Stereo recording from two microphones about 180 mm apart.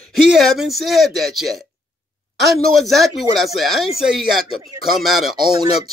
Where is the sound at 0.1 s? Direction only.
Centre (ahead or behind).